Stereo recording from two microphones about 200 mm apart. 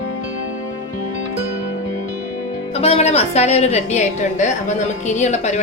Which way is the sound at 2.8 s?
30° left (ahead or behind).